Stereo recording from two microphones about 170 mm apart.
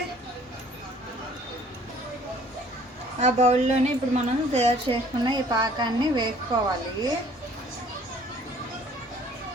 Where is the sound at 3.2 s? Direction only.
40° right (ahead or behind).